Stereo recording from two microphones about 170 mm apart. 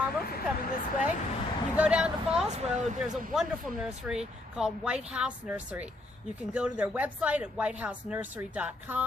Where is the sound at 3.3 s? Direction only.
5° right (ahead or behind).